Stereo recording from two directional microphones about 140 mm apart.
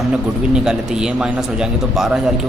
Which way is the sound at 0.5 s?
5° right (ahead or behind).